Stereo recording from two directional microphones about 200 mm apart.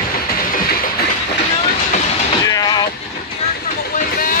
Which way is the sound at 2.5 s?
20° left (ahead or behind).